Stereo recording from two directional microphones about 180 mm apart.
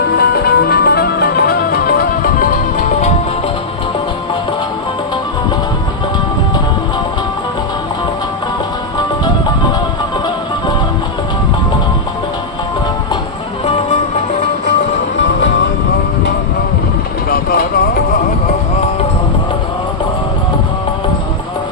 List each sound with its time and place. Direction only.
0.2 s music: 60° left (ahead or behind)
17.2 s vehicle: 55° left (ahead or behind)